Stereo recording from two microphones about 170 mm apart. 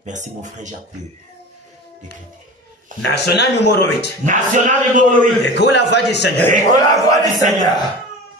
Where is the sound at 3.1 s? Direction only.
80° left.